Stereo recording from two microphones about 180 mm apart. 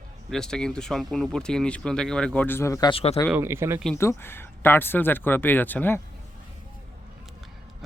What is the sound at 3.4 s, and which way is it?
Speech, 15° right (ahead or behind).